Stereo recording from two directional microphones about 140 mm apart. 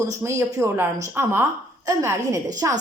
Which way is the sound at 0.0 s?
20° right (ahead or behind).